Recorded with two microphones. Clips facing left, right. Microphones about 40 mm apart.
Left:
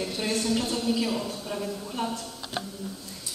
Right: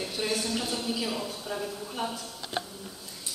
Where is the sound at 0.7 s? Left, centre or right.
Centre.